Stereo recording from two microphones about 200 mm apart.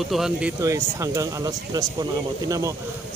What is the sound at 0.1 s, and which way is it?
Speech, 5° right (ahead or behind).